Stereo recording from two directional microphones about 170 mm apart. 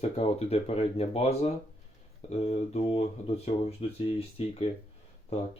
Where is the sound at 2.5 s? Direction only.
40° left (ahead or behind).